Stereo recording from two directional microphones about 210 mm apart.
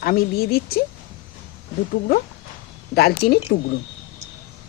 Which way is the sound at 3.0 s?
50° left (ahead or behind).